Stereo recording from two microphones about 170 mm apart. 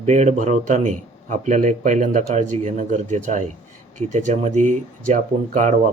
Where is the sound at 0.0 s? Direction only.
40° right (ahead or behind).